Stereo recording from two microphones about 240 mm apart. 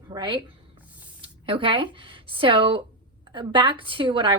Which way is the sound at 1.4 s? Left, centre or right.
Right.